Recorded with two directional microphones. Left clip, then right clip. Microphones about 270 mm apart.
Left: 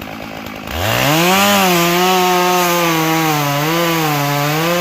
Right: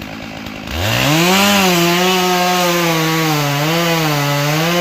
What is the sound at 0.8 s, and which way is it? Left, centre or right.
Chainsaw, centre.